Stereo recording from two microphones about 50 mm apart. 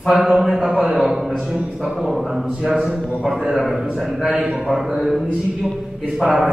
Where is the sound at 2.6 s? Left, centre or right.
Centre.